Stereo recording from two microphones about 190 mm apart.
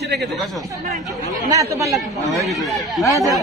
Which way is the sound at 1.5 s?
15° right (ahead or behind).